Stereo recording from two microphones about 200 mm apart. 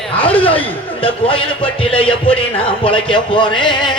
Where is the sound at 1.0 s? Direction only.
25° left (ahead or behind).